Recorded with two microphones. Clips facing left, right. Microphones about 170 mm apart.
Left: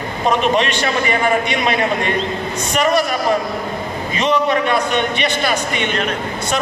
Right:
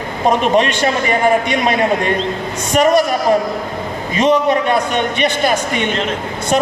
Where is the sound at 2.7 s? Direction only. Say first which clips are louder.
Right 5 dB; 45° right (ahead or behind).